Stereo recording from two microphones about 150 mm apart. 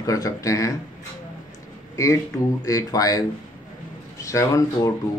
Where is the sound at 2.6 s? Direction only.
25° left (ahead or behind).